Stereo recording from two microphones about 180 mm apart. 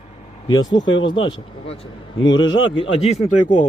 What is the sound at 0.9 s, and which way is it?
Speech, 90° left.